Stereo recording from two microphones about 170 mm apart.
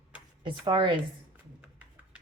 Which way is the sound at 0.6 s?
25° right (ahead or behind).